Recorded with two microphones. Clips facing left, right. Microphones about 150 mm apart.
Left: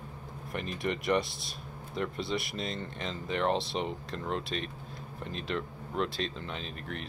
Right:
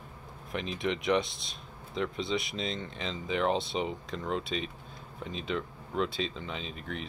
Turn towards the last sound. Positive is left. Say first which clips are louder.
# right 1 dB
turn(degrees=0)  # may be behind; listen again after turning